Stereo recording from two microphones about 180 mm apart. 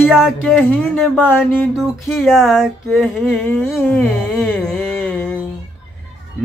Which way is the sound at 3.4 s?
10° left (ahead or behind).